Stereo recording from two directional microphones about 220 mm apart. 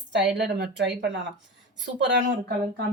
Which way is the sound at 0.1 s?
50° right (ahead or behind).